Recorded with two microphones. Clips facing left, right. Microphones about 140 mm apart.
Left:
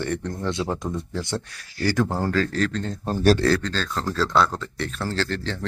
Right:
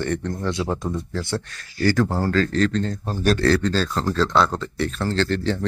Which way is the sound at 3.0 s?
35° left (ahead or behind).